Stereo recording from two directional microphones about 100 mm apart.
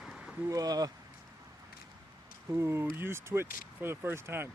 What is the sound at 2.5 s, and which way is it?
Speech, 25° right (ahead or behind).